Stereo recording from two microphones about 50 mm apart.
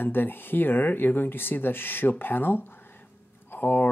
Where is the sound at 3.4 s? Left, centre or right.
Left.